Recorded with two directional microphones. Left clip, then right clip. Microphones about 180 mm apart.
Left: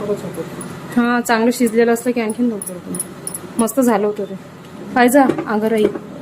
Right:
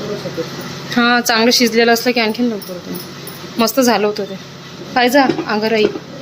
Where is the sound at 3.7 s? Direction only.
Centre (ahead or behind).